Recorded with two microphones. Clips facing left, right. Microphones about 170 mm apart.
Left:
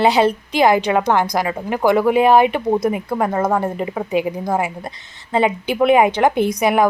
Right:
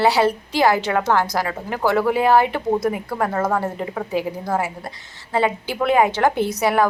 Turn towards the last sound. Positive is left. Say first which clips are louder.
# left 3 dB
turn(degrees=15)  # may be behind; listen again after turning